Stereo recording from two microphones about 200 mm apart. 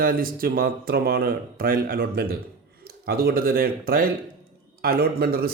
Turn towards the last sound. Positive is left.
turn(degrees=-50)  # may be behind; listen again after turning